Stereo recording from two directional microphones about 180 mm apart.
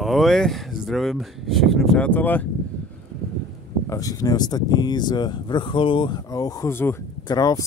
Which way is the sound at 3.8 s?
20° left (ahead or behind).